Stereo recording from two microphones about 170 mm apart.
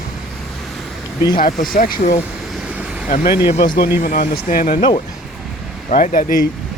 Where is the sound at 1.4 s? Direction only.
55° left (ahead or behind).